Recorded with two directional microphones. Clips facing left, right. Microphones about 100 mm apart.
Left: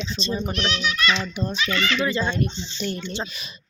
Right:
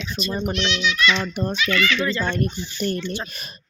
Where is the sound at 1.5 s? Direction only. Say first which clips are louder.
Right 3 dB; 30° left (ahead or behind).